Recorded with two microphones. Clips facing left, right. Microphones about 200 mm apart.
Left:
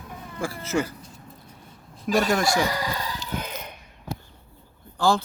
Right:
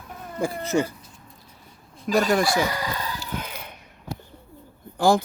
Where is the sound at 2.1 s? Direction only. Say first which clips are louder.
Right 1 dB; centre (ahead or behind).